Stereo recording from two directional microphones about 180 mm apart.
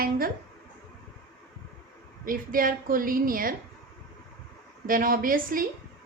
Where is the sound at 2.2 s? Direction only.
50° right (ahead or behind).